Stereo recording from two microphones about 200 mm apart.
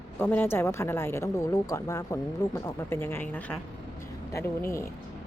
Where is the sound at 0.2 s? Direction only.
10° left (ahead or behind).